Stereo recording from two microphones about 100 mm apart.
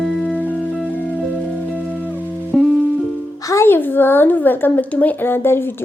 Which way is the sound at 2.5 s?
Centre (ahead or behind).